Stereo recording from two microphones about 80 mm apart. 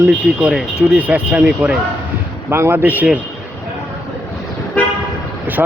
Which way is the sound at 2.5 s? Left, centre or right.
Right.